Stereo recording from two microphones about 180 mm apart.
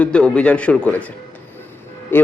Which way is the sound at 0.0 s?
5° left (ahead or behind).